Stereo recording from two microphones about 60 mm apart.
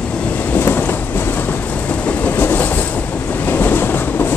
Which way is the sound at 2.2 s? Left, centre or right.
Left.